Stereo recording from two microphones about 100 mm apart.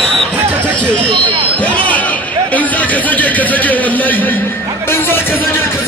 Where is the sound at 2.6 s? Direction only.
15° left (ahead or behind).